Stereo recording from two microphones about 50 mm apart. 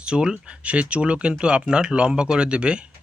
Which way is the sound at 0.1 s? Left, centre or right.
Centre.